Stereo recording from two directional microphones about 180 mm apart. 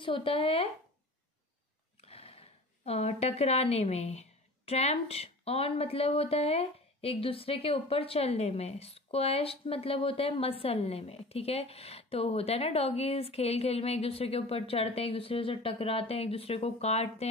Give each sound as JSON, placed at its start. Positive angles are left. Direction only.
{"t": 0.0, "sound": "a woman's voice", "side_deg": 30}
{"t": 2.0, "sound": "a woman's voice", "side_deg": 35}